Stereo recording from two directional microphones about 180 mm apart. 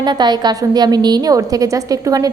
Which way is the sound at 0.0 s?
25° right (ahead or behind).